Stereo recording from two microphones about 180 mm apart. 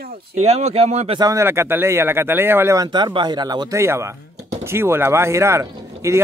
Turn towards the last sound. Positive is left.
turn(degrees=-15)  # may be behind; listen again after turning